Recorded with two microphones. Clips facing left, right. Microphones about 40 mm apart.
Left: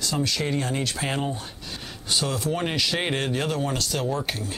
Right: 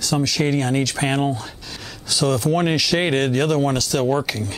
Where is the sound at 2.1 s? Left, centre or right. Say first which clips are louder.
Right 6 dB; right.